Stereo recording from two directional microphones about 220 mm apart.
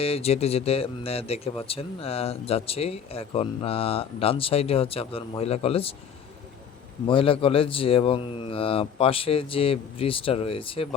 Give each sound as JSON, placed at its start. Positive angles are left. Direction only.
{"t": 0.0, "sound": "speech", "side_deg": 25}
{"t": 7.1, "sound": "speech", "side_deg": 25}